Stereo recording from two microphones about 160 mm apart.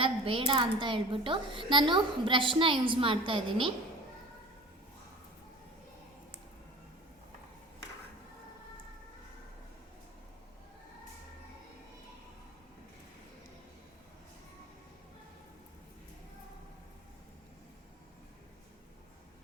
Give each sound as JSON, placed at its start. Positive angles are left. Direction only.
{"t": 0.0, "sound": "a woman's voice", "side_deg": -35}